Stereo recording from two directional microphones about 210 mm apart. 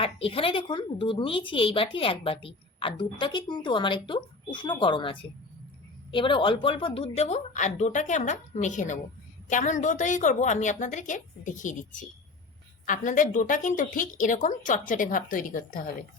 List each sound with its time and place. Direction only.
0.0 s a woman's voice: 25° left (ahead or behind)